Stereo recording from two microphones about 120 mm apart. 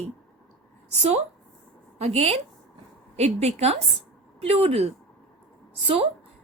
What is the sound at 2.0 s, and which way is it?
A woman's voice, 55° right (ahead or behind).